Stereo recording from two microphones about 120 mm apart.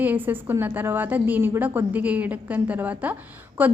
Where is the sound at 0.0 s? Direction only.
15° right (ahead or behind).